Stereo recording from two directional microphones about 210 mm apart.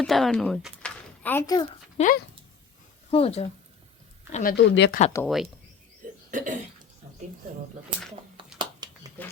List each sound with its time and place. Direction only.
0.0 s speech: centre (ahead or behind)
2.0 s speech: 40° left (ahead or behind)
3.1 s speech: 30° left (ahead or behind)
4.5 s speech: 55° left (ahead or behind)
5.2 s speech: centre (ahead or behind)
6.3 s a sound: 40° right (ahead or behind)
8.4 s a sound: 25° right (ahead or behind)
9.2 s speech: 10° left (ahead or behind)